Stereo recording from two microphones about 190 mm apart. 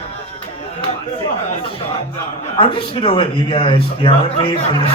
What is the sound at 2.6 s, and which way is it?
Speech, 25° left (ahead or behind).